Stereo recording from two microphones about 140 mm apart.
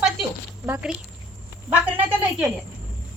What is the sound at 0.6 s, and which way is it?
Speech, 15° right (ahead or behind).